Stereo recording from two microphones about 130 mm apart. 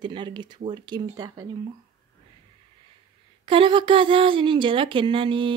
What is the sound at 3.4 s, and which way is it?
A woman's voice, 40° right (ahead or behind).